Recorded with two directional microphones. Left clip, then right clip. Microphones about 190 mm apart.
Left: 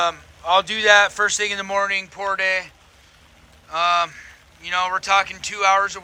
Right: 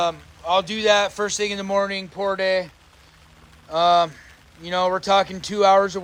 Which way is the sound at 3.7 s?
25° right (ahead or behind).